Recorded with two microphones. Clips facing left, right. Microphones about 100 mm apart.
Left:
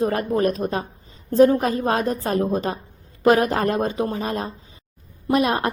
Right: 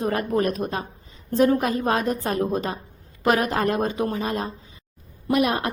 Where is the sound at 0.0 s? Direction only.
35° left (ahead or behind).